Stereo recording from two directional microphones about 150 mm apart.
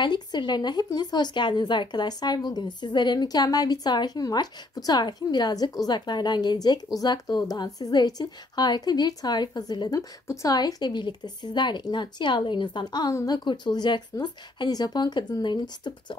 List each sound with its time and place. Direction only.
0.0 s a woman's voice: 30° left (ahead or behind)